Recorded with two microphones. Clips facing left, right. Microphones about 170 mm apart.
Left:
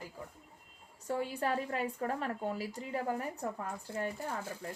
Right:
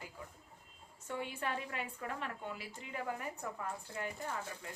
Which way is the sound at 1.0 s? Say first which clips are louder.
Left 6 dB; 40° left (ahead or behind).